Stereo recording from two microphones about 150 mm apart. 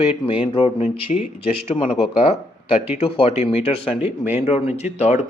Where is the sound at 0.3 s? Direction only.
40° left (ahead or behind).